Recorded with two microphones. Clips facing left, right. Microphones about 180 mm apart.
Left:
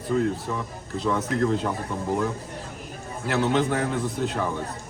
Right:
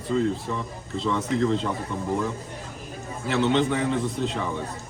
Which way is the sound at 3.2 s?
5° left (ahead or behind).